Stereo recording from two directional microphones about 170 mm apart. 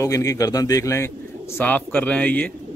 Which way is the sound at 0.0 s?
20° left (ahead or behind).